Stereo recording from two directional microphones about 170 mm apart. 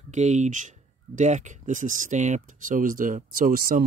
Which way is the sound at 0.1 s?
45° right (ahead or behind).